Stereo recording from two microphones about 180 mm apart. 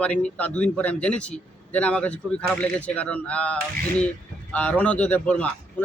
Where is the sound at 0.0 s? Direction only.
5° left (ahead or behind).